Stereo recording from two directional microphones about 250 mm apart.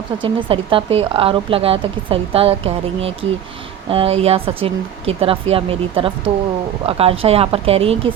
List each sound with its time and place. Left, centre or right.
0.2 s a woman's voice: centre